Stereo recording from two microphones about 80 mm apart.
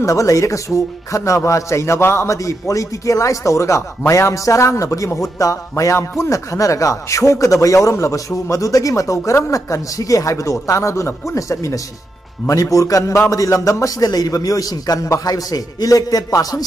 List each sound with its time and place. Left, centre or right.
0.0 s a man's voice: left